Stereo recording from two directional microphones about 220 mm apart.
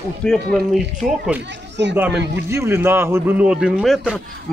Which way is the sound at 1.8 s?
55° right (ahead or behind).